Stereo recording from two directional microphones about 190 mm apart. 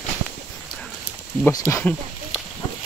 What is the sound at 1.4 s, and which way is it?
Speech, 15° left (ahead or behind).